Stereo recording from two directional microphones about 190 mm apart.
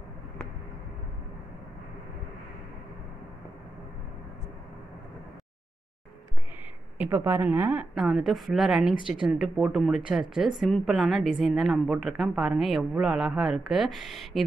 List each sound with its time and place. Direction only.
7.0 s a woman's voice: 10° right (ahead or behind)